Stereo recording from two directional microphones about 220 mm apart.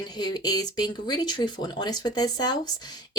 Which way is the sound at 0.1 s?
20° left (ahead or behind).